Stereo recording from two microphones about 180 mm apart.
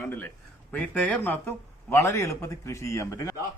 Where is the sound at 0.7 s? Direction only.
10° left (ahead or behind).